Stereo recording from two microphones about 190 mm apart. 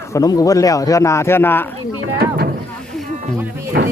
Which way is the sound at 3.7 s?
60° right (ahead or behind).